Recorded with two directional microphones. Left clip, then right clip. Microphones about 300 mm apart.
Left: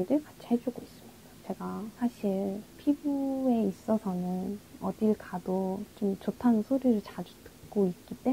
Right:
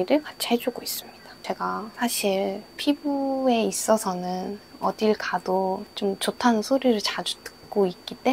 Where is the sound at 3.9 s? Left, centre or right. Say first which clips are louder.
Right 9 dB; centre.